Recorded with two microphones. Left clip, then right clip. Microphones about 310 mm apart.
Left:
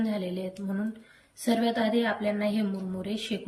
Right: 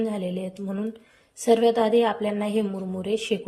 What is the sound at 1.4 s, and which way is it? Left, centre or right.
Speech, centre.